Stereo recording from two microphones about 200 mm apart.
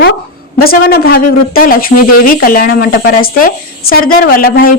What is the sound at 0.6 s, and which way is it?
Speech, 50° left (ahead or behind).